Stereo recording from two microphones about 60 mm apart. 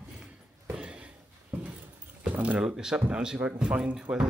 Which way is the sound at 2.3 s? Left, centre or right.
Right.